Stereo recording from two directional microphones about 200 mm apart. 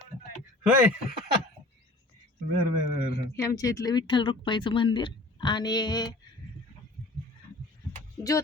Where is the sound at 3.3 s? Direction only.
15° left (ahead or behind).